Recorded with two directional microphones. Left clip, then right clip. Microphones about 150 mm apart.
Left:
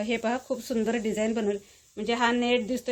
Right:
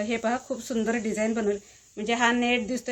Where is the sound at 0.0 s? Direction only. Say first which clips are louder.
Right 1 dB; 30° left (ahead or behind).